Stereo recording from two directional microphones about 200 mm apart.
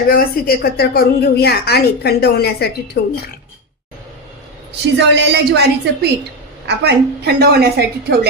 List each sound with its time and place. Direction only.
0.1 s a woman's voice: 50° left (ahead or behind)
4.9 s a woman's voice: 55° right (ahead or behind)